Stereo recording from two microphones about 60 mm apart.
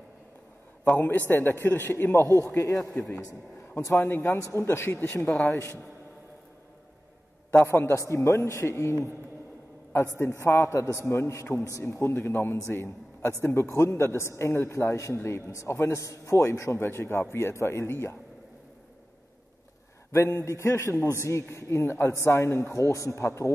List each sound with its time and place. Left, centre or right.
0.9 s a man's voice: left
2.2 s a man's voice: right
2.5 s speech: left
3.9 s a man's voice: left
5.3 s speech: centre
7.5 s a man's voice: left
8.6 s a man's voice: left
16.7 s a man's voice: left
20.1 s a man's voice: left